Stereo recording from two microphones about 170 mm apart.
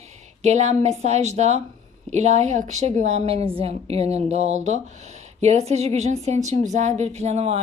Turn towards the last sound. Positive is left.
turn(degrees=-40)  # may be behind; listen again after turning